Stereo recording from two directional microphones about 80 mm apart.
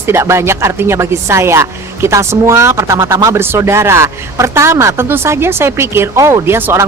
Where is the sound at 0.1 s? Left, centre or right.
Right.